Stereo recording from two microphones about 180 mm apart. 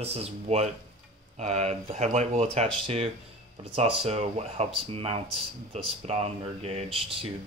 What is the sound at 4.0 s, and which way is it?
Speech, 35° right (ahead or behind).